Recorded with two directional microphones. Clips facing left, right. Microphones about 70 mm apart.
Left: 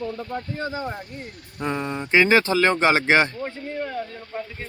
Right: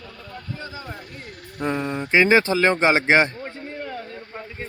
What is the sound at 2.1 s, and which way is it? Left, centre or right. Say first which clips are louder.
Speech: right 1 dB; centre.